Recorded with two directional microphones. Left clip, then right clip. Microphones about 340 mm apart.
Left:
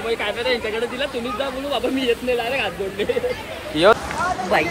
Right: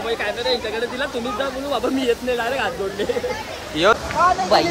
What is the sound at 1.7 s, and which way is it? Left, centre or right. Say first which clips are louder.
Speech: even; centre.